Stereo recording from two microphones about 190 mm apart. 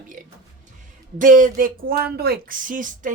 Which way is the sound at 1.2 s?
45° right (ahead or behind).